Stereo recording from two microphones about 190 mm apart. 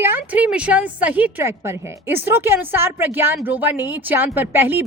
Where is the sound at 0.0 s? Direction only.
10° right (ahead or behind).